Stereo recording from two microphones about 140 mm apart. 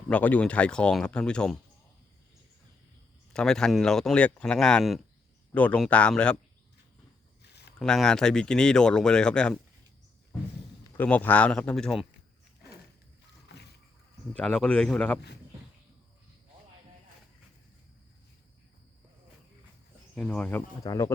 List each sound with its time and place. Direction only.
0.1 s speech: 10° left (ahead or behind)
3.3 s speech: 5° left (ahead or behind)
7.8 s speech: 5° left (ahead or behind)
10.9 s speech: 10° left (ahead or behind)
14.3 s speech: 5° left (ahead or behind)
20.1 s speech: 10° left (ahead or behind)
20.8 s speech: 25° left (ahead or behind)